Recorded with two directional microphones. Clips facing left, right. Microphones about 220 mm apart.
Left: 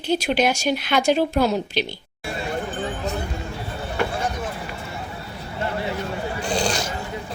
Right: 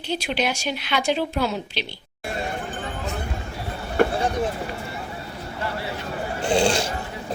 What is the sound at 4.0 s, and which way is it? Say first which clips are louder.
Vehicle: right 6 dB; 50° right (ahead or behind).